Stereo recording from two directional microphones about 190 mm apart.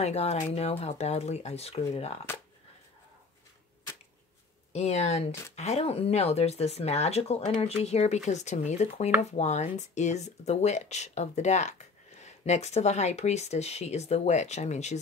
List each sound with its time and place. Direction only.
0.0 s speech: 35° left (ahead or behind)
4.7 s speech: 35° left (ahead or behind)